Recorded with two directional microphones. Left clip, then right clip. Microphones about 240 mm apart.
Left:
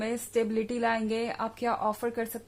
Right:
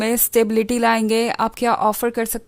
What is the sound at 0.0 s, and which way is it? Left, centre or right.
A woman's voice, right.